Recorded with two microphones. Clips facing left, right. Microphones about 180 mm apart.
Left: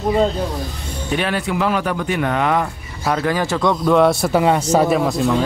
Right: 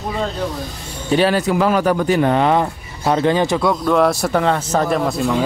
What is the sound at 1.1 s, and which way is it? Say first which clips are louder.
Speech: right 5 dB; 35° right (ahead or behind).